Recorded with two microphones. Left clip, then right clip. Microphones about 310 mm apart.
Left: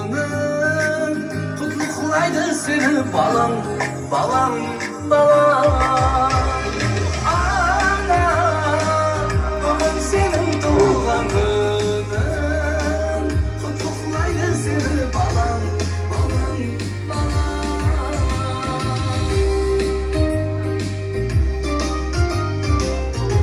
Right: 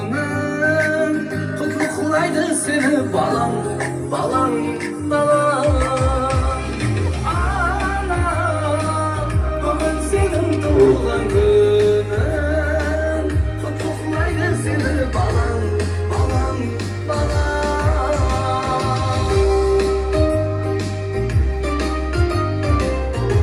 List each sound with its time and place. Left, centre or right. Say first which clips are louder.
0.5 s music: right 3 dB; centre
10.8 s music: right 2 dB; centre
14.8 s music: right 1 dB; centre
17.6 s music: right 5 dB; centre
19.3 s music: right 3 dB; centre